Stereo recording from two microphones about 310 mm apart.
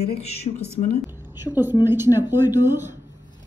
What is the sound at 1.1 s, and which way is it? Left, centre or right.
A woman's voice, centre.